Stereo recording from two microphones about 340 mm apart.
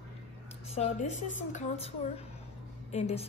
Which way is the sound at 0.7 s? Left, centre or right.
Left.